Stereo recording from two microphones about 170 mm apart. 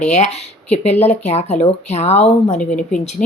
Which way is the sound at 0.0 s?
40° left (ahead or behind).